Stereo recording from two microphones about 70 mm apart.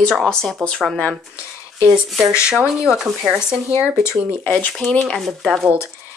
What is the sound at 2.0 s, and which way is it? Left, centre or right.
Speech, centre.